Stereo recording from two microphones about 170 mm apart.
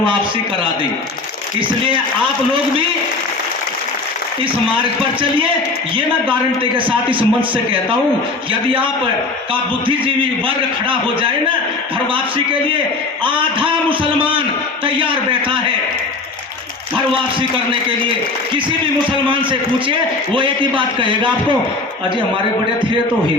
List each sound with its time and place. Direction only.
6.7 s a man's voice: 30° right (ahead or behind)
9.8 s a man's voice: 30° right (ahead or behind)
13.2 s a man's voice: 30° right (ahead or behind)
19.3 s a man's voice: 30° right (ahead or behind)